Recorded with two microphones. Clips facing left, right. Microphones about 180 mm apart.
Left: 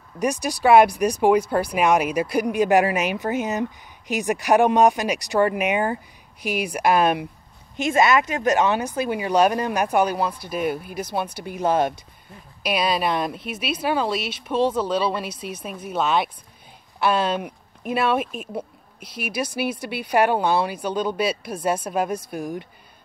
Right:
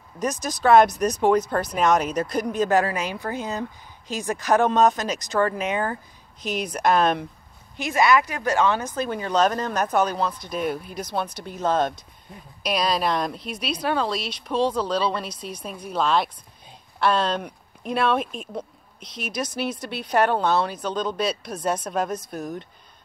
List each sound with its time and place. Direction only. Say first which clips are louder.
0.2 s speech: left 3 dB; 15° left (ahead or behind)
7.7 s a woman's voice: left 1 dB; 20° left (ahead or behind)